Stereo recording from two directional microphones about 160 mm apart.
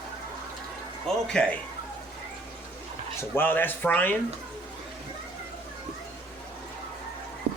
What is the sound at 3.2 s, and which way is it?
Speech, 15° left (ahead or behind).